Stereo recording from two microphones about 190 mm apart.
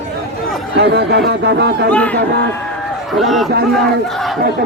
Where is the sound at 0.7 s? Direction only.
60° right (ahead or behind).